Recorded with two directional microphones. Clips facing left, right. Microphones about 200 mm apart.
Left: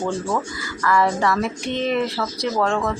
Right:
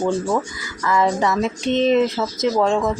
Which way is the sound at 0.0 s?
15° right (ahead or behind).